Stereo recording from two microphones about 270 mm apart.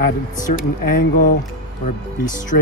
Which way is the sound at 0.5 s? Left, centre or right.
Left.